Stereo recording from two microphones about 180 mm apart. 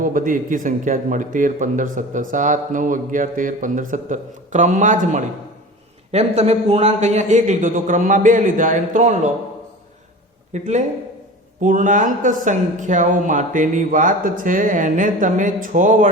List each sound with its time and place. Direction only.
0.0 s a man's voice: 50° right (ahead or behind)
10.5 s a man's voice: 40° right (ahead or behind)